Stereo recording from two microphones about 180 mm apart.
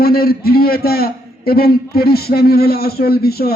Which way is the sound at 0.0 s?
55° left (ahead or behind).